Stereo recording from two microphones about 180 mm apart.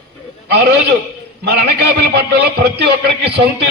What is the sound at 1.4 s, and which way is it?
A man's voice, 65° right (ahead or behind).